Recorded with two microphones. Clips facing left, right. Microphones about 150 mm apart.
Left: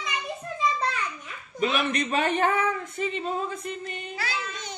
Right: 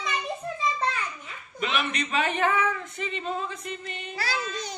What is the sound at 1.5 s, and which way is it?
Speech, 40° left (ahead or behind).